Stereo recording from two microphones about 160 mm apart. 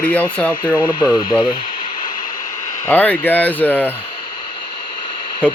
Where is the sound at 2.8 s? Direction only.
10° left (ahead or behind).